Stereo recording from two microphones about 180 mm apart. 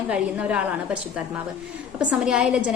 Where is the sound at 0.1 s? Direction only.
5° right (ahead or behind).